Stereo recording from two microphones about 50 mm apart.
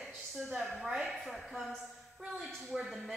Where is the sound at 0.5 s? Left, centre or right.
Centre.